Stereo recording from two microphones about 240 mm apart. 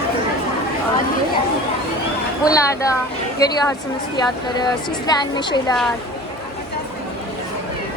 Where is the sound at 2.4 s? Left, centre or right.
Centre.